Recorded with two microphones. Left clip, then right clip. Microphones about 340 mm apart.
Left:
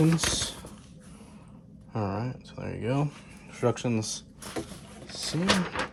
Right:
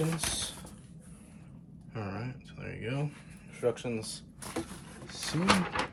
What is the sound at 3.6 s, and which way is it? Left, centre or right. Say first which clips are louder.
Speech: left 4 dB; left.